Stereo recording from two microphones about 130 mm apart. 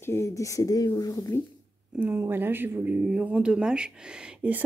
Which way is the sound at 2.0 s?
15° right (ahead or behind).